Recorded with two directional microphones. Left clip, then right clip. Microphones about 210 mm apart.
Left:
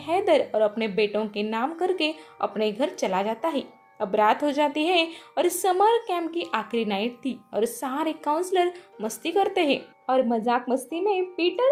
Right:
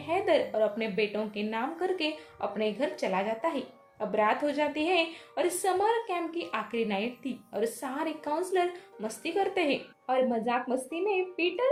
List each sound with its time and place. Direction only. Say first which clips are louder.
0.0 s a woman's voice: left 5 dB; 35° left (ahead or behind)